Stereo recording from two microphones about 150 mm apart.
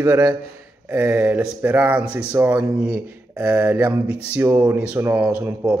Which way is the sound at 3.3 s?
20° right (ahead or behind).